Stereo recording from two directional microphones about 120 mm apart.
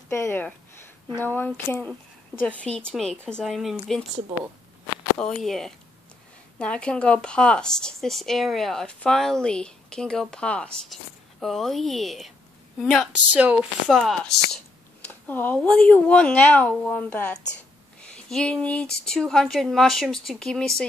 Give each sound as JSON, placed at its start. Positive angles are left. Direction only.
{"t": 0.1, "sound": "a woman's voice", "side_deg": 20}
{"t": 5.1, "sound": "a woman's voice", "side_deg": 5}
{"t": 13.8, "sound": "a woman's voice", "side_deg": 5}
{"t": 15.0, "sound": "a woman's voice", "side_deg": 15}